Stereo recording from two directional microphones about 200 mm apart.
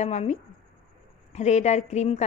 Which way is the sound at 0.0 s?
35° left (ahead or behind).